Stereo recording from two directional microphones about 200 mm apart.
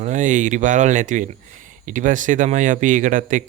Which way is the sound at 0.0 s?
40° right (ahead or behind).